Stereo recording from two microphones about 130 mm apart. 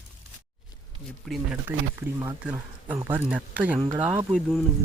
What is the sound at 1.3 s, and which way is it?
Speech, centre (ahead or behind).